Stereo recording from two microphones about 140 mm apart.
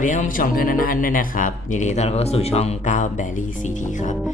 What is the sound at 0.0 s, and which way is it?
Speech, 65° left (ahead or behind).